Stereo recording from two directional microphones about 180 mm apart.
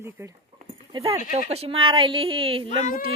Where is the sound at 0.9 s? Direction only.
30° right (ahead or behind).